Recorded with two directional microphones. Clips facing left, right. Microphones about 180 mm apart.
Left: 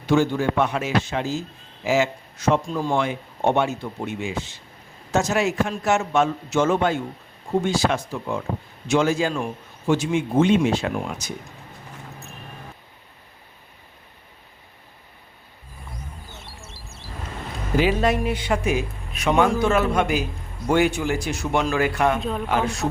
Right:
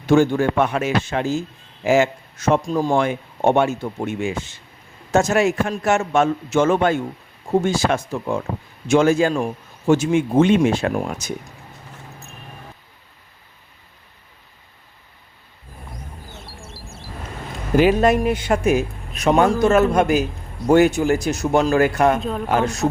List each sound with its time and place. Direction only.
0.1 s a man's voice: 50° right (ahead or behind)
17.7 s a man's voice: 50° right (ahead or behind)
22.2 s speech: centre (ahead or behind)
22.4 s a man's voice: 45° right (ahead or behind)